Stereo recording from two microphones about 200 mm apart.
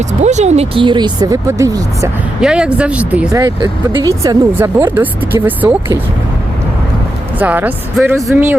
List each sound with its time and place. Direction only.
0.1 s speech: 35° right (ahead or behind); by 2.0 s 15° right (ahead or behind)
2.4 s speech: 5° right (ahead or behind)
3.6 s speech: 20° right (ahead or behind)
7.3 s speech: 10° right (ahead or behind)